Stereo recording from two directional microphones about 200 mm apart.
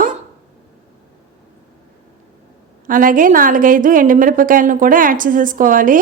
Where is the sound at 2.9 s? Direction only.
45° right (ahead or behind).